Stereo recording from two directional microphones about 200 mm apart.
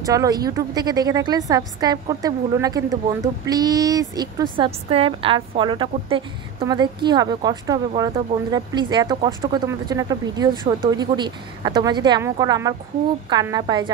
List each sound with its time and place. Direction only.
0.0 s a woman's voice: 15° right (ahead or behind)